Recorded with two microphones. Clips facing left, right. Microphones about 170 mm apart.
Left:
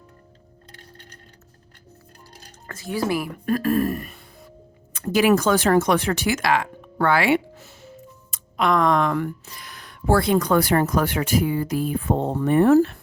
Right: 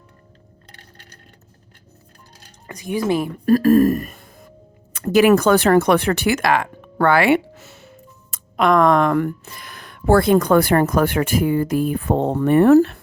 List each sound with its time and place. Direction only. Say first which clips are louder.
2.6 s speech: right 4 dB; 15° right (ahead or behind)
3.4 s speech: right 9 dB; 40° right (ahead or behind)
4.9 s speech: right 5 dB; 60° right (ahead or behind)
8.3 s speech: right 4 dB; 55° right (ahead or behind)